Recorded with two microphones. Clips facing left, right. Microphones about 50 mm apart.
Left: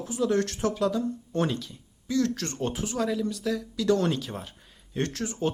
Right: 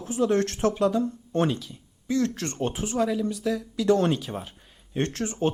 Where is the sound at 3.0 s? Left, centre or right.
Centre.